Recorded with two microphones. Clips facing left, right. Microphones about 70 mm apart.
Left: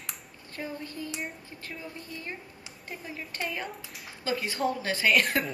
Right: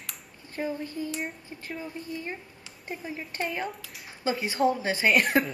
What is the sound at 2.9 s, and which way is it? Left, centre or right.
Speech, centre.